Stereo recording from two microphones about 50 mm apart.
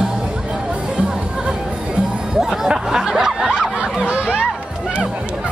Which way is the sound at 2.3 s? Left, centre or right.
Centre.